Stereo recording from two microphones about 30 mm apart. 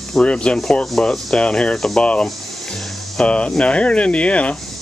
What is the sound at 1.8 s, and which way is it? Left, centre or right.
Speech, centre.